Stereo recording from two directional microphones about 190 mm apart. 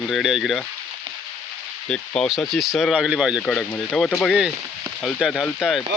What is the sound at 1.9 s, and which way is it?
Speech, centre (ahead or behind).